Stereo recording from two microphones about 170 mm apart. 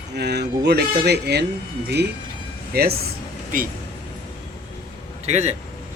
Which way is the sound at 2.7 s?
65° right (ahead or behind).